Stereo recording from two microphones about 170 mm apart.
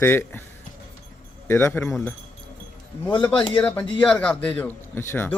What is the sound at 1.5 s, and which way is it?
Speech, 15° left (ahead or behind).